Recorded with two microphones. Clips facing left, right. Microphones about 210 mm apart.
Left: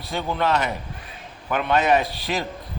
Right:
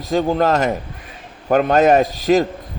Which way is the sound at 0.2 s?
45° right (ahead or behind).